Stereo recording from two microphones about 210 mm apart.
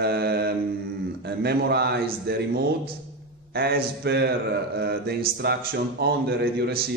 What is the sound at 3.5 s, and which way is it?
A man's voice, 50° right (ahead or behind).